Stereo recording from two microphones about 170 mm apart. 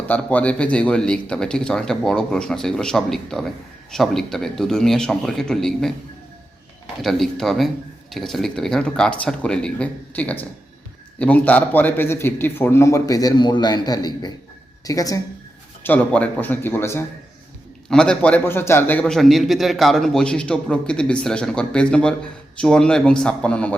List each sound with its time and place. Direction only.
0.1 s a man's voice: 10° left (ahead or behind)
7.0 s a man's voice: centre (ahead or behind); by 15.2 s 20° left (ahead or behind)
15.8 s a man's voice: 10° left (ahead or behind)